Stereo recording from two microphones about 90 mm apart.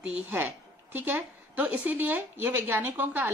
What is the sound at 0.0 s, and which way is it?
A woman's voice, 20° right (ahead or behind).